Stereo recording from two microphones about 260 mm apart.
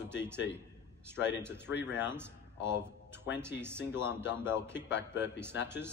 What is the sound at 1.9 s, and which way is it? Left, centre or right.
Speech, centre.